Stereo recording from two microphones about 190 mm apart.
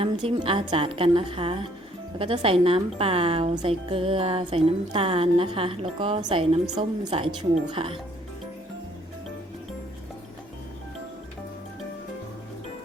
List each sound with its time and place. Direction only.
0.0 s a woman's voice: 30° right (ahead or behind)